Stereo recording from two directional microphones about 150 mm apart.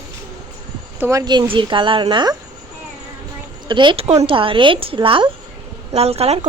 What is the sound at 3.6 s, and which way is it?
A woman's voice, 30° right (ahead or behind).